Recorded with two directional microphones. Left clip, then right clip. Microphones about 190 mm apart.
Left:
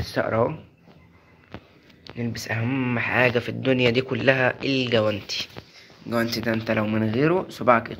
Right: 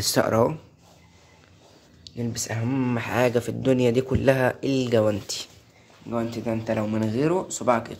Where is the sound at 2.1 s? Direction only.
20° right (ahead or behind).